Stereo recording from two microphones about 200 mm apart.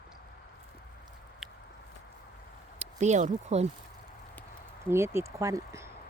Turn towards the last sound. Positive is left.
turn(degrees=-15)  # may be behind; listen again after turning